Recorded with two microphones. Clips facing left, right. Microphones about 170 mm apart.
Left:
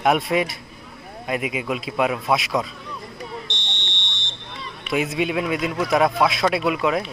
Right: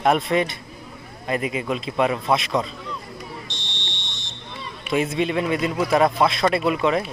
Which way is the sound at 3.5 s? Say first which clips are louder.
Left 2 dB; 20° left (ahead or behind).